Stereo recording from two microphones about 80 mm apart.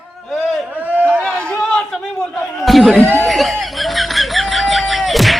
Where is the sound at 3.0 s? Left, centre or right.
Left.